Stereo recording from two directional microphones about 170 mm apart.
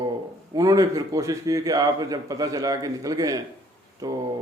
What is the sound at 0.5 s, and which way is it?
Speech, 20° right (ahead or behind).